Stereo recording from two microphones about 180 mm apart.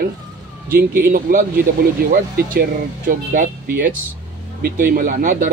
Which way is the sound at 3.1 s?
50° right (ahead or behind).